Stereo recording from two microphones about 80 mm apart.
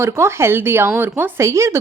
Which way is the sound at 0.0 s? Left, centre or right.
Right.